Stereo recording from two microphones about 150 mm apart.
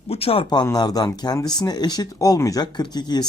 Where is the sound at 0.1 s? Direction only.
40° left (ahead or behind).